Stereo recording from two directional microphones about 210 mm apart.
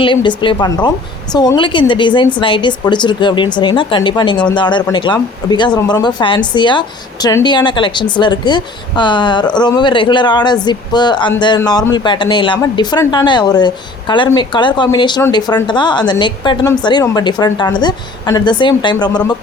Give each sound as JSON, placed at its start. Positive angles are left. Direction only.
{"t": 0.0, "sound": "speech", "side_deg": 25}